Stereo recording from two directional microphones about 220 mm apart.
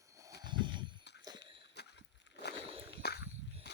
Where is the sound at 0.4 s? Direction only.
20° right (ahead or behind).